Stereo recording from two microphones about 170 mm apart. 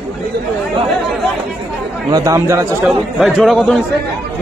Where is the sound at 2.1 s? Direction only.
20° right (ahead or behind).